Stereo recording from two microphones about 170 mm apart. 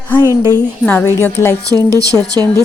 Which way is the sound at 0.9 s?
10° left (ahead or behind).